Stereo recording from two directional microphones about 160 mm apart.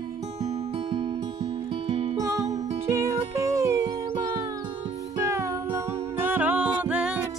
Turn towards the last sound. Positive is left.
turn(degrees=-5)  # may be behind; listen again after turning